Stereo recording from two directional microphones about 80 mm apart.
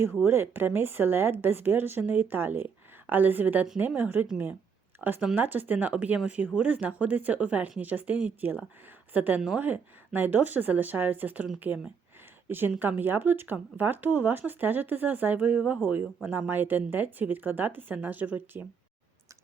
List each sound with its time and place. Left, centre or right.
0.3 s speech: right
12.5 s speech: right